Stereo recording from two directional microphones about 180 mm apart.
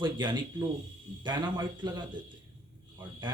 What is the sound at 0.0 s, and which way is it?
Speech, 25° right (ahead or behind).